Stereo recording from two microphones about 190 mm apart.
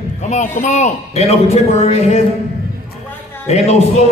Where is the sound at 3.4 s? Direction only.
35° left (ahead or behind).